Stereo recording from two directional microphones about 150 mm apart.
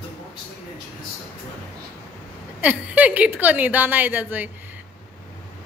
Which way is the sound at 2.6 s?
10° right (ahead or behind).